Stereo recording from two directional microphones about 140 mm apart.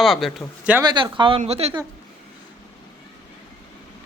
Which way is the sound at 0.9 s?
35° right (ahead or behind).